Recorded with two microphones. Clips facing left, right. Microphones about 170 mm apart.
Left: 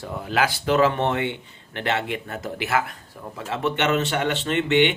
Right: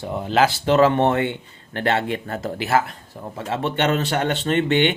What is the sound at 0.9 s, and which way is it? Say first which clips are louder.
A man's voice: right 5 dB; 45° right (ahead or behind).